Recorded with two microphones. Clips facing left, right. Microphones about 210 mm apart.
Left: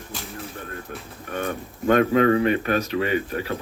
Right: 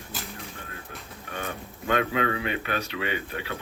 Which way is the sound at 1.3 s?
45° left (ahead or behind).